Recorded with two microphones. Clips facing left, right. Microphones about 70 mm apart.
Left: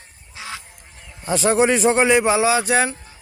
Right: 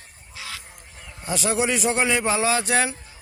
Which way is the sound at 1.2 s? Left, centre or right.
Left.